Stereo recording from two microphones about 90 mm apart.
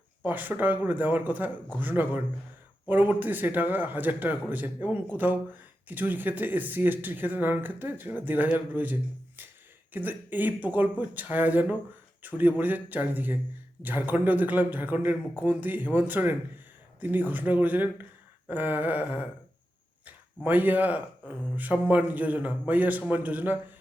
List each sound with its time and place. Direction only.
0.3 s speech: 20° right (ahead or behind)
18.4 s a sound: 20° right (ahead or behind)
20.1 s speech: 20° right (ahead or behind)